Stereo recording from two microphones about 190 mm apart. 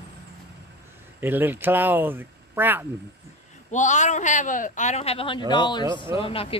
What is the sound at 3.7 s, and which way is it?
A man's voice, 40° left (ahead or behind).